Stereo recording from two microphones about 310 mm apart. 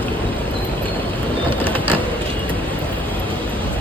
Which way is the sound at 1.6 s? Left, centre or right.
Centre.